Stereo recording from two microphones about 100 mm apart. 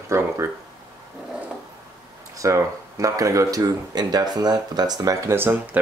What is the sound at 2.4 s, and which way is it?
Speech, 30° right (ahead or behind).